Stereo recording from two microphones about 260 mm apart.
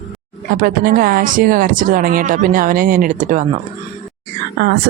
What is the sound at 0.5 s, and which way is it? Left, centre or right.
Speech, right.